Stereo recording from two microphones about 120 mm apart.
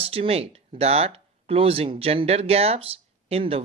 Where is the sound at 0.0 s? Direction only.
55° right (ahead or behind).